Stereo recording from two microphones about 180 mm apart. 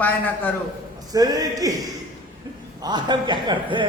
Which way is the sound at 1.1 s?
20° right (ahead or behind).